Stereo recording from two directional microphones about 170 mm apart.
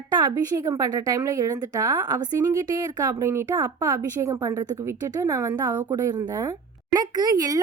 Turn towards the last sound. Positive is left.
turn(degrees=-20)  # may be behind; listen again after turning